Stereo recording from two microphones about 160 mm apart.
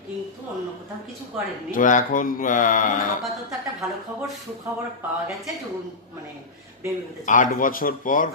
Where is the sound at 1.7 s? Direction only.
55° left (ahead or behind).